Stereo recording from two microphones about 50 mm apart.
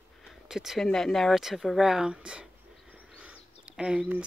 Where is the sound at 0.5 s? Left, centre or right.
Centre.